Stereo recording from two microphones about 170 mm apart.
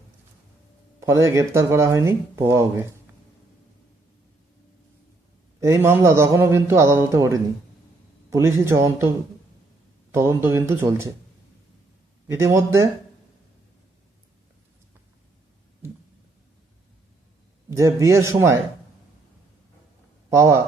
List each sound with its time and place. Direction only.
0.9 s speech: 15° right (ahead or behind)
5.5 s speech: 15° right (ahead or behind)
12.3 s speech: 15° right (ahead or behind)
17.7 s speech: 20° right (ahead or behind)
20.3 s speech: 15° right (ahead or behind)